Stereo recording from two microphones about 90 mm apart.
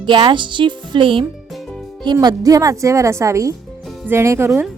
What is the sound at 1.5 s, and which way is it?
Music, centre (ahead or behind).